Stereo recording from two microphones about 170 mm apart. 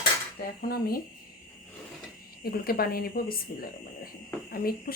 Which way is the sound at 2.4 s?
65° left (ahead or behind).